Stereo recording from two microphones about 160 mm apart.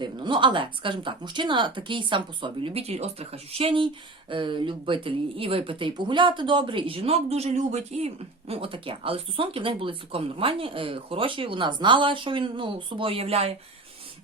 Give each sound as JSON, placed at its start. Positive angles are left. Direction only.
{"t": 0.0, "sound": "speech", "side_deg": -30}